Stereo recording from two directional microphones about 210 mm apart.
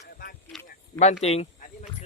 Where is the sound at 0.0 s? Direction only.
45° left (ahead or behind).